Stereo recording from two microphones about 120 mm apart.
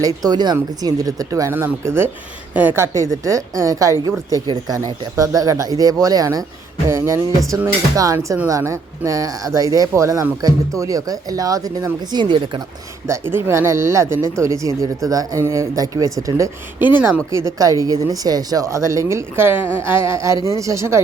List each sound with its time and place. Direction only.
0.0 s speech: 35° right (ahead or behind)
13.1 s speech: 20° right (ahead or behind)